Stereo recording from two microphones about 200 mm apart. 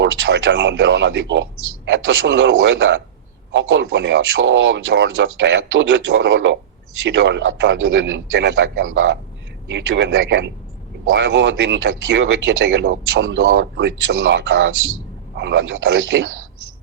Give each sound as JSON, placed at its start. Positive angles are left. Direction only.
{"t": 0.0, "sound": "speech", "side_deg": -65}
{"t": 9.6, "sound": "speech", "side_deg": -70}